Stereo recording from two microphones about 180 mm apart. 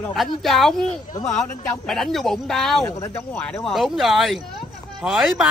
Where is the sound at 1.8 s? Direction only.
Centre (ahead or behind).